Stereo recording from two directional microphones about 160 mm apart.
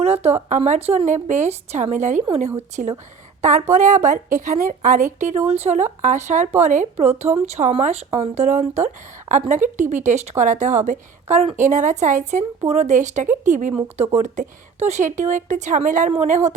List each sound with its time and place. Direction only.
0.0 s speech: 40° right (ahead or behind)